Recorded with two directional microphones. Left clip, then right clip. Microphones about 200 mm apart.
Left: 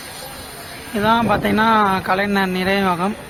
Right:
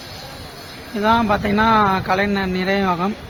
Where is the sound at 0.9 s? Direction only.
Centre (ahead or behind).